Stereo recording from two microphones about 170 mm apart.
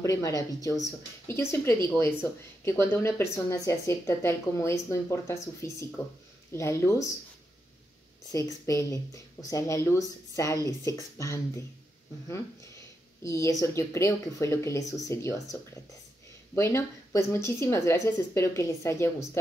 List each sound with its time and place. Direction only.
0.0 s speech: 20° left (ahead or behind)
8.3 s speech: 20° left (ahead or behind)
13.2 s speech: 20° left (ahead or behind)